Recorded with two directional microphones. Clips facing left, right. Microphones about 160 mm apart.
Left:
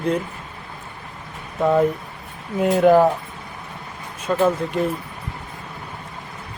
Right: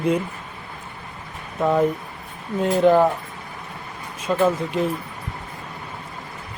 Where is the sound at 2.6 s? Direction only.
5° left (ahead or behind).